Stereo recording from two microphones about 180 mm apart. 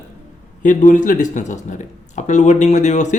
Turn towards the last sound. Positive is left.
turn(degrees=40)  # may be behind; listen again after turning